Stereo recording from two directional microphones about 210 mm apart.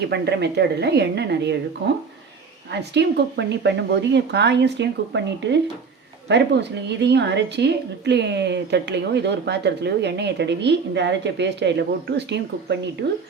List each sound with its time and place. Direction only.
0.1 s a woman's voice: 50° right (ahead or behind)
2.7 s a woman's voice: 55° right (ahead or behind)